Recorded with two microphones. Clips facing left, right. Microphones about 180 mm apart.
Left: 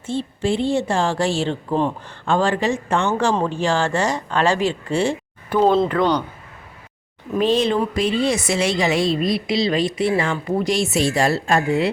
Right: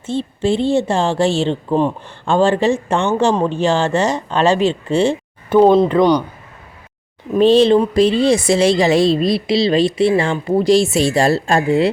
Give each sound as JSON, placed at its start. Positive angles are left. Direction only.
{"t": 0.0, "sound": "a woman's voice", "side_deg": -20}
{"t": 7.3, "sound": "speech", "side_deg": -30}